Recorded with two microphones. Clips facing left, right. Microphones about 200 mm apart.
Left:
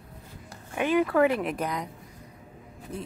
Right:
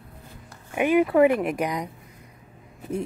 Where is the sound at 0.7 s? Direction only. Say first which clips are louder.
Right 4 dB; 15° right (ahead or behind).